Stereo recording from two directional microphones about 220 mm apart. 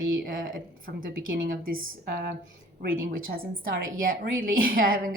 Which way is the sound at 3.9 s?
40° right (ahead or behind).